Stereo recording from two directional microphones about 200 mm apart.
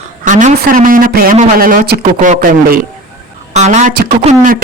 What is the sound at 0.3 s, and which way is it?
A man's voice, 40° right (ahead or behind).